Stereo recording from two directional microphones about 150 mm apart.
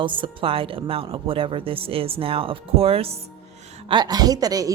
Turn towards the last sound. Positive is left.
turn(degrees=-25)  # may be behind; listen again after turning